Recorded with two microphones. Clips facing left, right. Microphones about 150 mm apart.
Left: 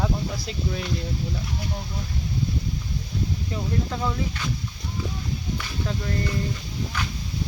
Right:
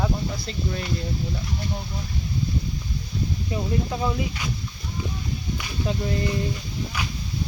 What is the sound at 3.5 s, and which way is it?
Speech, 15° right (ahead or behind).